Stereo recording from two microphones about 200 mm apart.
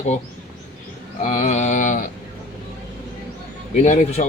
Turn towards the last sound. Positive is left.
turn(degrees=35)  # may be behind; listen again after turning